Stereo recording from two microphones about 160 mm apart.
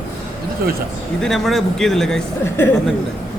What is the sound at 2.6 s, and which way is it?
Speech, 15° left (ahead or behind).